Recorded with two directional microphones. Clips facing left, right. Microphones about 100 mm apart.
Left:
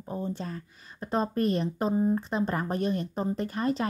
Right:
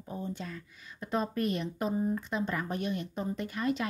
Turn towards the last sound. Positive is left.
turn(degrees=35)  # may be behind; listen again after turning